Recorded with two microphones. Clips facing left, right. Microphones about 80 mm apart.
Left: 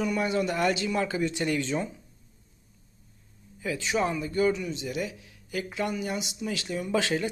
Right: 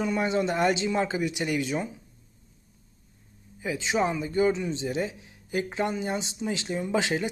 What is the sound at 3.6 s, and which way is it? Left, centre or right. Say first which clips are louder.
A man's voice: right 1 dB; right.